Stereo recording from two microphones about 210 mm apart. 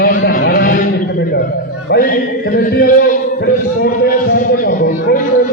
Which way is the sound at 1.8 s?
45° left (ahead or behind).